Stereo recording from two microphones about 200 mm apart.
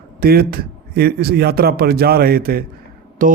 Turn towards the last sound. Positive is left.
turn(degrees=-40)  # may be behind; listen again after turning